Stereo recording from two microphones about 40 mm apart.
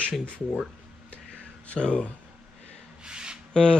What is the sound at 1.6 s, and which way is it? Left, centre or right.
Speech, left.